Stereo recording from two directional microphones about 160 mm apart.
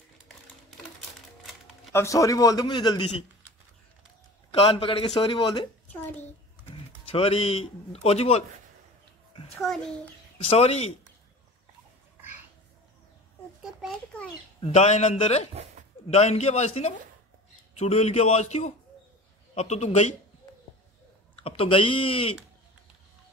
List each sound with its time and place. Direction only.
1.9 s a man's voice: 20° left (ahead or behind)
4.5 s a man's voice: 35° left (ahead or behind)
6.7 s speech: 35° left (ahead or behind)
10.5 s a man's voice: 40° left (ahead or behind)
13.6 s a sound: 5° right (ahead or behind)
14.6 s a man's voice: 45° left (ahead or behind)
21.4 s a man's voice: 35° left (ahead or behind)